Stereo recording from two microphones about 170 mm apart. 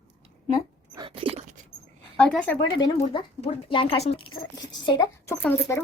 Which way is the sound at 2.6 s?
25° left (ahead or behind).